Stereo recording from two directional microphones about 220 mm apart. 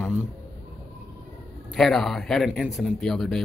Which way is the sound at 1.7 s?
Centre (ahead or behind).